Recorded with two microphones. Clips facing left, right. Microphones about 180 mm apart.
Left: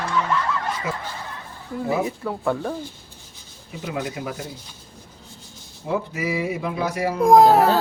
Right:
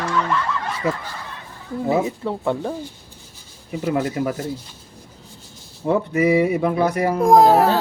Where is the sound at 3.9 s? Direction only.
50° right (ahead or behind).